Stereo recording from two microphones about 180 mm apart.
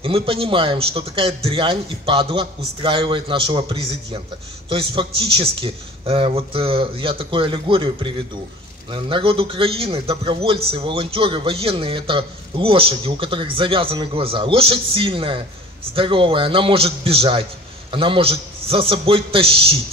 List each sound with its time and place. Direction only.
0.0 s a man's voice: 30° right (ahead or behind)